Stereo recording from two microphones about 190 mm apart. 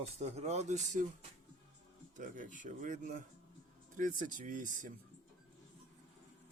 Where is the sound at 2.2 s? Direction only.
45° right (ahead or behind).